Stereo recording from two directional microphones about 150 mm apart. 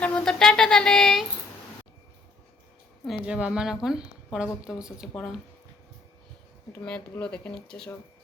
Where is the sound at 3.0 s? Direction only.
5° right (ahead or behind).